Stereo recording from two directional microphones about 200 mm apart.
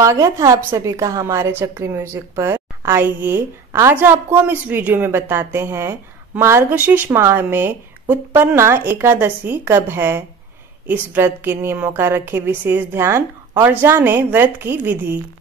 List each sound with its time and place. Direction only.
0.0 s a woman's voice: 15° right (ahead or behind)